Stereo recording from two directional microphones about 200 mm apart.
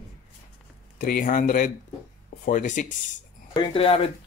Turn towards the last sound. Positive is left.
turn(degrees=30)  # may be behind; listen again after turning